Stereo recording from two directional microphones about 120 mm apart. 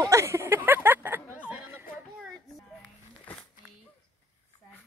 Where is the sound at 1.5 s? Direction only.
15° right (ahead or behind).